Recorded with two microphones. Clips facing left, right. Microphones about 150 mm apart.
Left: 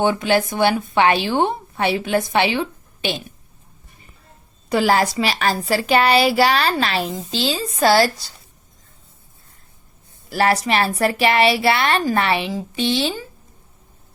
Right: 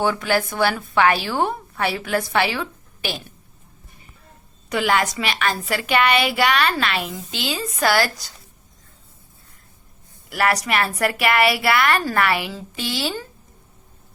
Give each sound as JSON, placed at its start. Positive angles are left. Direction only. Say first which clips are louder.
{"t": 0.0, "sound": "speech", "louder": "left 3 dB", "side_deg": 20}
{"t": 4.7, "sound": "a woman's voice", "louder": "left 4 dB", "side_deg": 35}
{"t": 10.2, "sound": "speech", "louder": "left 3 dB", "side_deg": 30}